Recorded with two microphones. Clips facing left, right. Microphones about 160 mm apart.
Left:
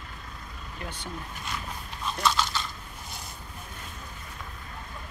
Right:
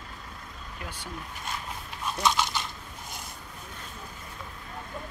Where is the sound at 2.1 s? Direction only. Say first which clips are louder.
Right 1 dB; 15° right (ahead or behind).